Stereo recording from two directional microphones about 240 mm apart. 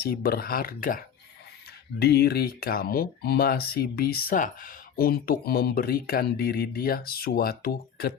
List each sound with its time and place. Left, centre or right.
0.0 s speech: left